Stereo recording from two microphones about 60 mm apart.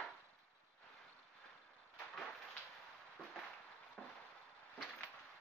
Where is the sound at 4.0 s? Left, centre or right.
Centre.